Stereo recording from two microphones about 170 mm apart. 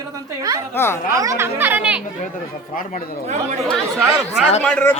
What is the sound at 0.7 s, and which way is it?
Speech, 15° left (ahead or behind).